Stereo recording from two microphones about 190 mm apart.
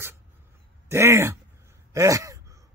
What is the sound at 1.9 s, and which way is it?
Gasp, 15° right (ahead or behind).